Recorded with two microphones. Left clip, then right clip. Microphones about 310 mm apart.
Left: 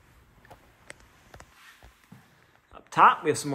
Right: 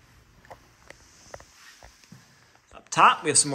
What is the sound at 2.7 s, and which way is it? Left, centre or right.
Speech, centre.